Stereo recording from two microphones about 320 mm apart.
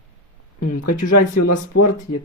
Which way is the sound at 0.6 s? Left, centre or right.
Left.